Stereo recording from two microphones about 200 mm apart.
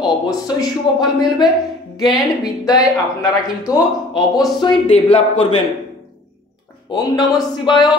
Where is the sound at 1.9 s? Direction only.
Centre (ahead or behind).